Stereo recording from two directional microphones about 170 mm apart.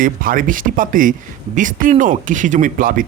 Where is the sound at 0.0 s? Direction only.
55° right (ahead or behind).